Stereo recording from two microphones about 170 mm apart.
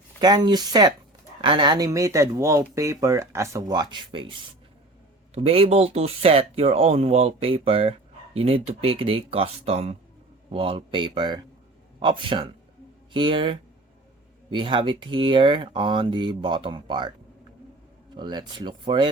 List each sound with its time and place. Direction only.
0.2 s speech: 25° right (ahead or behind)
18.1 s speech: 25° right (ahead or behind)